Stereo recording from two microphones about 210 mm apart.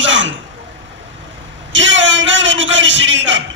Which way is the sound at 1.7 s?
60° right (ahead or behind).